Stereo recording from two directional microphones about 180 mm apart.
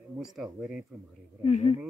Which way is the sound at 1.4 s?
35° left (ahead or behind).